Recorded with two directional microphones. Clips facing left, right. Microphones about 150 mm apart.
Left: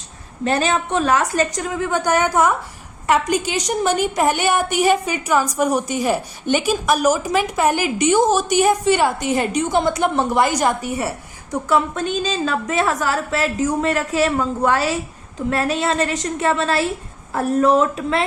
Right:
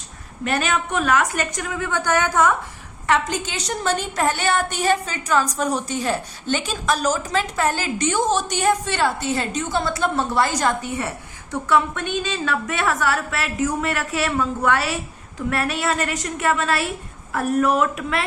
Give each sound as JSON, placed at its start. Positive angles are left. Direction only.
{"t": 0.4, "sound": "a woman's voice", "side_deg": 30}
{"t": 2.0, "sound": "a woman's voice", "side_deg": 15}
{"t": 11.5, "sound": "a woman's voice", "side_deg": 30}